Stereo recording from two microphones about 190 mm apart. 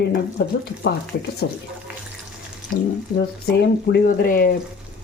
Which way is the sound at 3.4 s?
55° left (ahead or behind).